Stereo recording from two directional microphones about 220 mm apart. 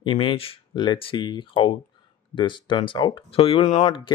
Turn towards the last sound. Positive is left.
turn(degrees=20)  # may be behind; listen again after turning